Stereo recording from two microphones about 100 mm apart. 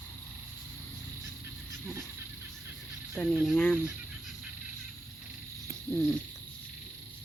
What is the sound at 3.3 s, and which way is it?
Speech, 10° right (ahead or behind).